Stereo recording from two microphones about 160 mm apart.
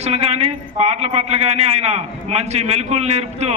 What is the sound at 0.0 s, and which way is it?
A man's voice, 40° right (ahead or behind).